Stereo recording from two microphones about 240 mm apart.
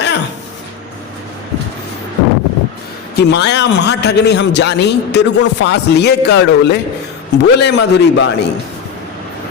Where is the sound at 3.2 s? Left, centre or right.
Left.